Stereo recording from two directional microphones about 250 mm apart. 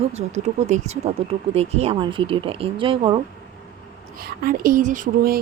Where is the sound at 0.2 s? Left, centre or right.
Right.